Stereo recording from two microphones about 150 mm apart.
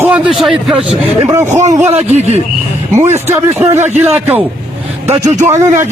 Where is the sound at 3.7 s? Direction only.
45° right (ahead or behind).